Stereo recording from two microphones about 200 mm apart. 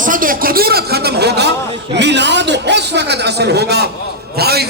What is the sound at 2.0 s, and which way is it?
A man's voice, 60° right (ahead or behind).